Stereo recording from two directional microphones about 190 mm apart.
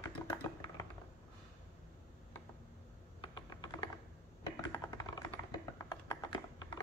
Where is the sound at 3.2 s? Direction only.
20° left (ahead or behind).